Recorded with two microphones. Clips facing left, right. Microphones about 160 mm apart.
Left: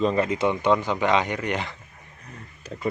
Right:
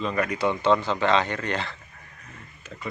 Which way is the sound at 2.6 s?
35° left (ahead or behind).